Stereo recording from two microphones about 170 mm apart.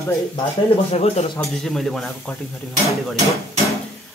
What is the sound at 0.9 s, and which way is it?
Speech, 35° left (ahead or behind).